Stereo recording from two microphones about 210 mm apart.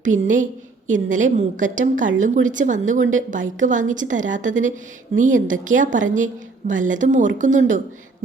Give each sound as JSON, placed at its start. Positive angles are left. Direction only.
{"t": 0.0, "sound": "a woman's voice", "side_deg": -35}